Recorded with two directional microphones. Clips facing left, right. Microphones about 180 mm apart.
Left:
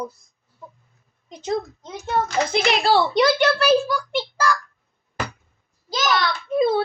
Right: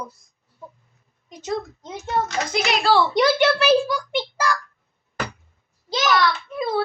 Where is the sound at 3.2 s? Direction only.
10° right (ahead or behind).